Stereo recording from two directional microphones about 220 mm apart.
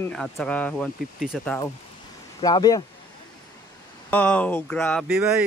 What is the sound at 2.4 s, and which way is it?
Speech, 20° left (ahead or behind).